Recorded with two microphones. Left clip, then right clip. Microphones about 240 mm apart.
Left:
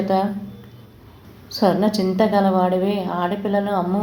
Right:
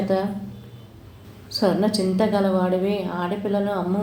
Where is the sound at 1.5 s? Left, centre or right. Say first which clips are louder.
Left 3 dB; left.